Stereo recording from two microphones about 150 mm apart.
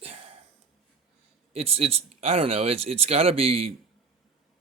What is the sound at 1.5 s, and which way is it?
Speech, 40° right (ahead or behind).